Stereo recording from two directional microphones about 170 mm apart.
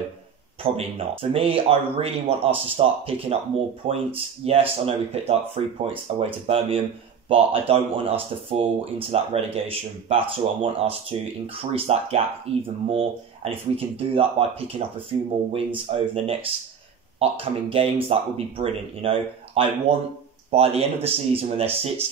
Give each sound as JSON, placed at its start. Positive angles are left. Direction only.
{"t": 0.7, "sound": "speech", "side_deg": -35}
{"t": 15.5, "sound": "speech", "side_deg": -35}